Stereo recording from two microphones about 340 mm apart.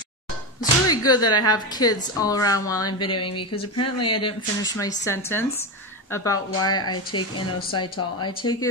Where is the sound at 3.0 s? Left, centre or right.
Left.